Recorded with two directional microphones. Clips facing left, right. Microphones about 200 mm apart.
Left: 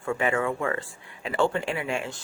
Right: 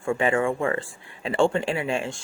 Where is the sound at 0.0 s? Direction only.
30° right (ahead or behind).